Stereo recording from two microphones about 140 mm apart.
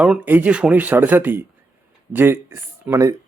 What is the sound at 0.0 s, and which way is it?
Speech, 10° right (ahead or behind).